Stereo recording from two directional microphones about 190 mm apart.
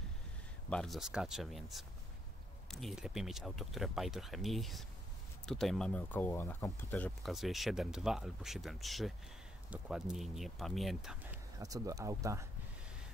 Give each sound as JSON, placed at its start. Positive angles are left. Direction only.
{"t": 0.7, "sound": "speech", "side_deg": 0}
{"t": 11.5, "sound": "speech", "side_deg": -20}